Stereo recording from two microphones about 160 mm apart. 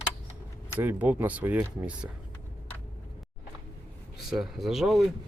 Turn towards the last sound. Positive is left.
turn(degrees=0)  # may be behind; listen again after turning